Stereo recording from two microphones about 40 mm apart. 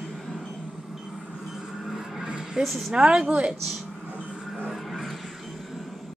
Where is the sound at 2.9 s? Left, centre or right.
Right.